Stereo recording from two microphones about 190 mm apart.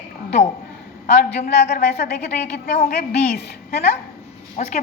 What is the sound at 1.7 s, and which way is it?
Speech, 55° left (ahead or behind).